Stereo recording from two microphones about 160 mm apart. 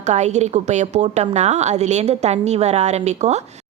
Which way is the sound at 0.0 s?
45° right (ahead or behind).